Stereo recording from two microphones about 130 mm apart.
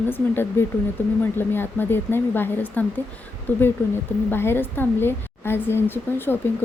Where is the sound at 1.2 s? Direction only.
15° left (ahead or behind).